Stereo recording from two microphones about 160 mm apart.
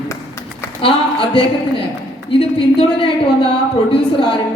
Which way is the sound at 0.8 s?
35° left (ahead or behind).